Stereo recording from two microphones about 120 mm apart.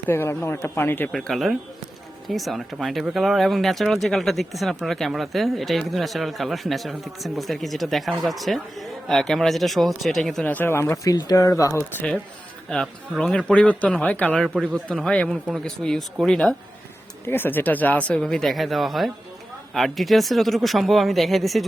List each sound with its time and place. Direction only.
0.1 s speech: 20° left (ahead or behind)
1.1 s speech: centre (ahead or behind)
10.4 s speech: 15° left (ahead or behind)
11.8 s speech: 15° left (ahead or behind)
17.2 s speech: 15° left (ahead or behind); by 21.6 s centre (ahead or behind)